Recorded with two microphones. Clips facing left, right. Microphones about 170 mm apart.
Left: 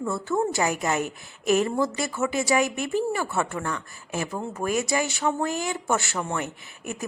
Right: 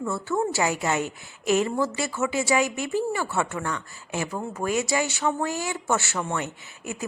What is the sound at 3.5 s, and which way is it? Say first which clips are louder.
Speech: even; 35° left (ahead or behind).